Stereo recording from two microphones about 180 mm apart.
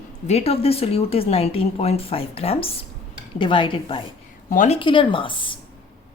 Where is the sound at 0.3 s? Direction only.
35° left (ahead or behind).